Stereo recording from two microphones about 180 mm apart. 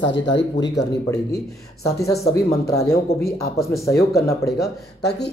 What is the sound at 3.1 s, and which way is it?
Speech, 60° left (ahead or behind).